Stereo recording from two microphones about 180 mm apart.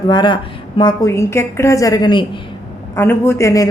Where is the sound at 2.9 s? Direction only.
15° left (ahead or behind).